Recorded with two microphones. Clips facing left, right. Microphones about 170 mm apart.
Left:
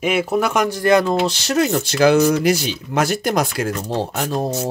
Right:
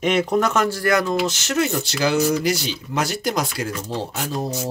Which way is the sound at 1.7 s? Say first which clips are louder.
Left 7 dB; 50° left (ahead or behind).